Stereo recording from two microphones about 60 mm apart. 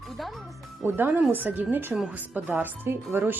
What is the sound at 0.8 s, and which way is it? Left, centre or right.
Speech, right.